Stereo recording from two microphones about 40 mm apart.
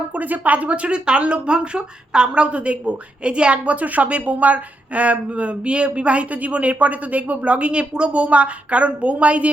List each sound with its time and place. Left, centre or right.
0.1 s speech: right
3.7 s speech: right